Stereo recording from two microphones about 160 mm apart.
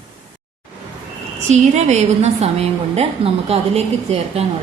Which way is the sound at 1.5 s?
45° right (ahead or behind).